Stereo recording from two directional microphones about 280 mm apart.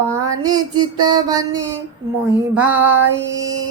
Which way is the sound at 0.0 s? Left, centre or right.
Centre.